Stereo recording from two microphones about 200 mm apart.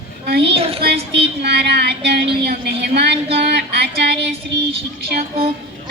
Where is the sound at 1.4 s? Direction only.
55° right (ahead or behind).